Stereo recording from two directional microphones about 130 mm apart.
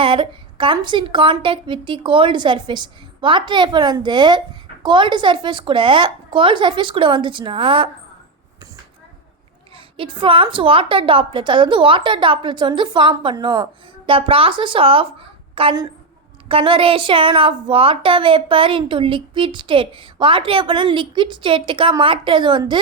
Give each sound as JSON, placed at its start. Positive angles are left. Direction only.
{"t": 0.0, "sound": "a woman's voice", "side_deg": -40}
{"t": 9.7, "sound": "a woman's voice", "side_deg": -40}